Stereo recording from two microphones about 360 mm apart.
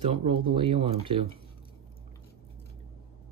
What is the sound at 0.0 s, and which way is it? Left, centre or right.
Speech, centre.